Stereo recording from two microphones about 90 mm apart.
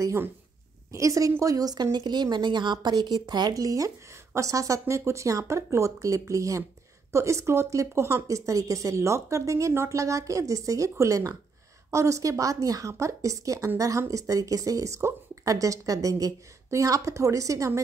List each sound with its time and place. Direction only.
0.0 s a woman's voice: 30° right (ahead or behind)